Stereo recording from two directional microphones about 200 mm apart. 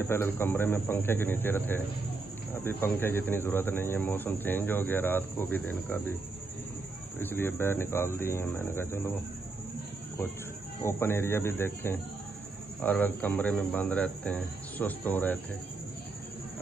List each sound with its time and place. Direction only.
0.0 s a man's voice: 10° left (ahead or behind)
7.2 s a man's voice: 10° left (ahead or behind)
10.8 s a man's voice: 10° left (ahead or behind)